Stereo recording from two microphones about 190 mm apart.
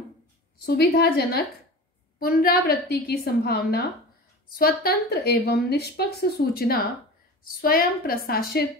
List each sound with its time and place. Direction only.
0.6 s a woman's voice: 55° left (ahead or behind)